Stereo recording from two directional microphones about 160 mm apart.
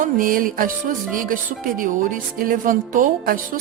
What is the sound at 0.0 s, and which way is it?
Speech, 60° right (ahead or behind).